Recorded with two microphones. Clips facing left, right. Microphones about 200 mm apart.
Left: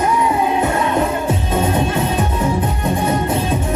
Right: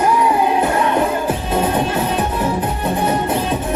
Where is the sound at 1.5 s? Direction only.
30° right (ahead or behind).